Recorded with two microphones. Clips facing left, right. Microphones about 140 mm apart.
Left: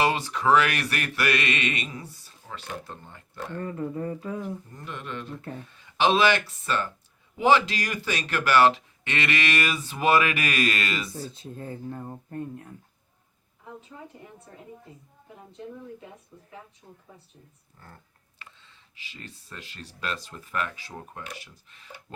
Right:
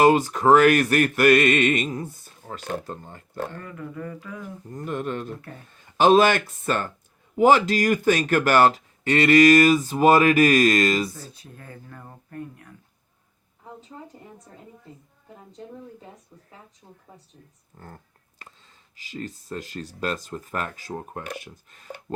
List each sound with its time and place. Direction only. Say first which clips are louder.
0.0 s music: right 7 dB; 45° right (ahead or behind)
3.6 s speech: left 4 dB; 30° left (ahead or behind)
4.7 s music: right 8 dB; 45° right (ahead or behind)
7.3 s speech: right 4 dB; 45° right (ahead or behind)
11.3 s speech: left 6 dB; 25° left (ahead or behind)
17.7 s speech: right 6 dB; 40° right (ahead or behind)